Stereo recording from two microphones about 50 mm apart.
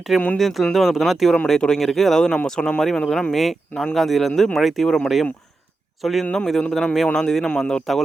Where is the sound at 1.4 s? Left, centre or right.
Centre.